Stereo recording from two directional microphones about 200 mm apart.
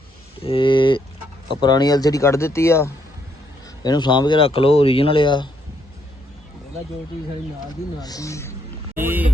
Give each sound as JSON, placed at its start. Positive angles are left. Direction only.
{"t": 0.3, "sound": "speech", "side_deg": 25}
{"t": 7.9, "sound": "speech", "side_deg": 20}
{"t": 9.0, "sound": "speech", "side_deg": -10}